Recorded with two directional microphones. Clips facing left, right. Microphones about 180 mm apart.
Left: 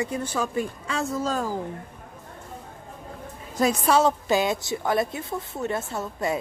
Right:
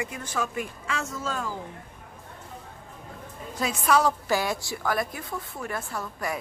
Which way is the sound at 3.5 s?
45° left (ahead or behind).